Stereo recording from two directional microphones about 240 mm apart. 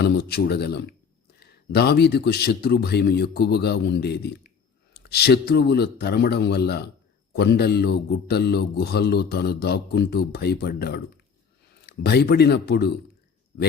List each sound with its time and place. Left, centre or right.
0.0 s a man's voice: left